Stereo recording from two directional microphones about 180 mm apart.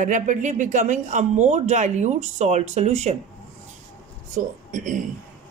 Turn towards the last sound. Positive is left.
turn(degrees=-45)  # may be behind; listen again after turning